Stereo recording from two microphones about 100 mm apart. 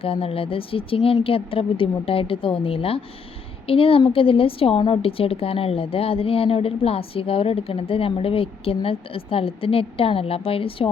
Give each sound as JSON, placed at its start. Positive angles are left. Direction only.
{"t": 0.0, "sound": "a woman's voice", "side_deg": 70}